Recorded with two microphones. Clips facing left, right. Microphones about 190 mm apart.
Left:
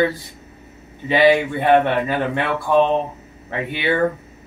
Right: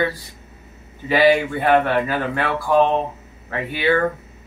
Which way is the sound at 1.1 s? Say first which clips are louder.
Left 1 dB; 25° left (ahead or behind).